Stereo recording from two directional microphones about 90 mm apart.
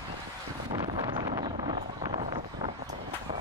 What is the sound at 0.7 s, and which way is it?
Vehicle, 60° right (ahead or behind).